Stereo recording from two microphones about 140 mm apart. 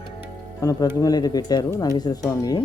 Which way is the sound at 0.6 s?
25° left (ahead or behind).